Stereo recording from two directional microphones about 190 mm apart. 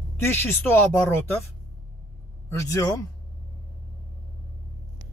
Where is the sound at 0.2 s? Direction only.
10° left (ahead or behind).